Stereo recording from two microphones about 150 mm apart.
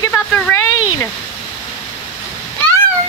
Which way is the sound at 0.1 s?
15° left (ahead or behind).